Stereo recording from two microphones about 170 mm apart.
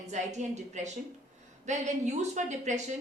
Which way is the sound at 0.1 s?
45° right (ahead or behind).